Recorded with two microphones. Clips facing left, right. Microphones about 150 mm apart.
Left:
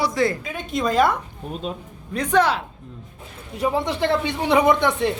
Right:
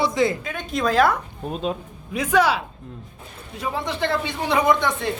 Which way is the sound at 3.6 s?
30° left (ahead or behind).